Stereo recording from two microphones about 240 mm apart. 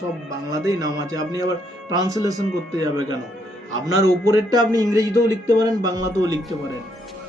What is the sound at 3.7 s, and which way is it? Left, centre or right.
Speech, left.